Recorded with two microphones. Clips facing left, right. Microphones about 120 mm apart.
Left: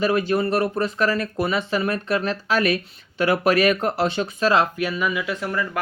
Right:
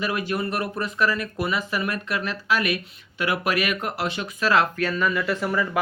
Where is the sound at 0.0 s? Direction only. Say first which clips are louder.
Left 6 dB; 30° left (ahead or behind).